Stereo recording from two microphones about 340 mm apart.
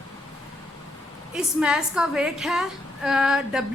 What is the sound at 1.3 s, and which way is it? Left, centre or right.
A woman's voice, centre.